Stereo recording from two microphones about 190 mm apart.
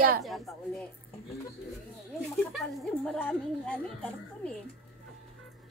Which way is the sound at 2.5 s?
5° left (ahead or behind).